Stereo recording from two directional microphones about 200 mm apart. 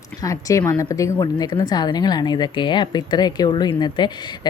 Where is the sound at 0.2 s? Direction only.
15° left (ahead or behind).